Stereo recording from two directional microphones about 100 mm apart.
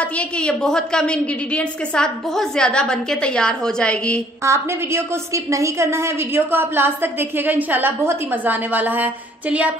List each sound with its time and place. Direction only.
0.0 s a woman's voice: 10° left (ahead or behind)
4.4 s a woman's voice: 25° right (ahead or behind)